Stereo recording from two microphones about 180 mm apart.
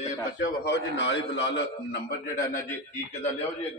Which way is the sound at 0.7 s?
80° left.